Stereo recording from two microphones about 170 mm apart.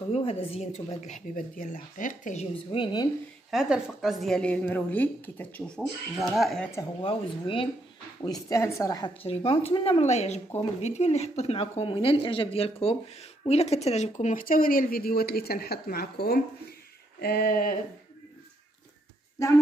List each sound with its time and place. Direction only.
0.1 s a woman's voice: 35° left (ahead or behind)
2.7 s speech: 30° left (ahead or behind)
3.4 s a woman's voice: 5° right (ahead or behind)
7.0 s speech: 30° left (ahead or behind)
8.2 s speech: 20° left (ahead or behind)
9.2 s speech: 35° left (ahead or behind); by 16.3 s 65° left (ahead or behind)
17.2 s a sound: 65° left (ahead or behind)